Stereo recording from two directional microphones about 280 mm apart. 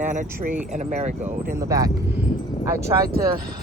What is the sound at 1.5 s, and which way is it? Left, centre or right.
Speech, centre.